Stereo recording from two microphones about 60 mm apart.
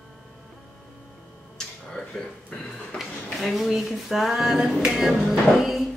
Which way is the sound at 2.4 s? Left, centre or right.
Left.